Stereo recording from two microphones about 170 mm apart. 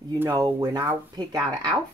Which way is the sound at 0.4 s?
20° right (ahead or behind).